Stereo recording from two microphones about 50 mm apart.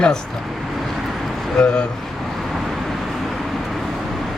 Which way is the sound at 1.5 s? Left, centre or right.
Centre.